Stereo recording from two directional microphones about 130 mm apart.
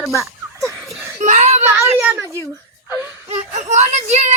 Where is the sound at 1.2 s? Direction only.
65° right (ahead or behind).